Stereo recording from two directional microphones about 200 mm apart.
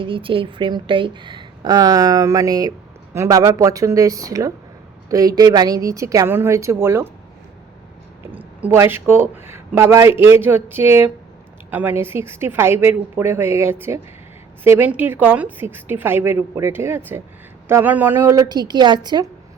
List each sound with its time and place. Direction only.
0.0 s speech: 25° right (ahead or behind)
8.3 s speech: 10° right (ahead or behind)